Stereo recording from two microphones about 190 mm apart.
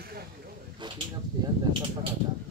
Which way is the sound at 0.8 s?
25° right (ahead or behind).